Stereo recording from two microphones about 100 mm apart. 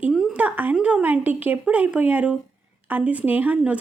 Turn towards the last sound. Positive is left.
turn(degrees=-15)  # may be behind; listen again after turning